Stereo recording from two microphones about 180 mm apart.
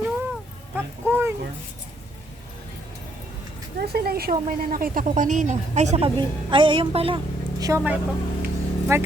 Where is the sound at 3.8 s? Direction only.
60° right (ahead or behind); by 6.1 s 40° right (ahead or behind).